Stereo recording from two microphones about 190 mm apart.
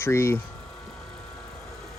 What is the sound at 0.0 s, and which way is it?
Speech, 15° left (ahead or behind).